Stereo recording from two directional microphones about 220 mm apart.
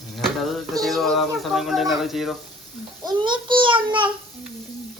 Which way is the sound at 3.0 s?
20° right (ahead or behind).